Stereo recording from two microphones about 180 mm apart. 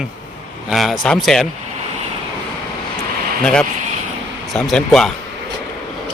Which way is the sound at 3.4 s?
5° left (ahead or behind).